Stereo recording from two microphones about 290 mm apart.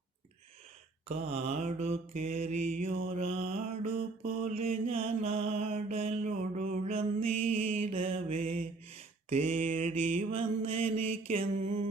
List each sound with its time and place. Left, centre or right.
1.0 s mantra: right
10.8 s mantra: right
11.3 s mantra: right